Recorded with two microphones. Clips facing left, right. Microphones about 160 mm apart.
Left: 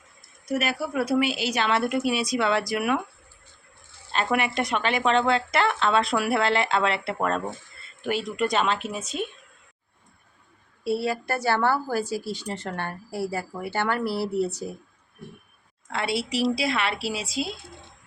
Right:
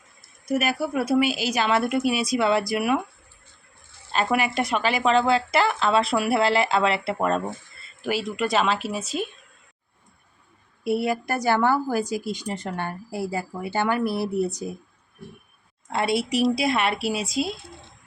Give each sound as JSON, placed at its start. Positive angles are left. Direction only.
{"t": 0.4, "sound": "a woman's voice", "side_deg": -10}
{"t": 4.1, "sound": "a woman's voice", "side_deg": -5}
{"t": 10.8, "sound": "a woman's voice", "side_deg": -15}
{"t": 16.0, "sound": "a woman's voice", "side_deg": -50}